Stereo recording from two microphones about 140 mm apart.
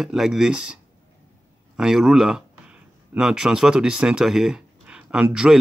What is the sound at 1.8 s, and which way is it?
Speech, 5° right (ahead or behind).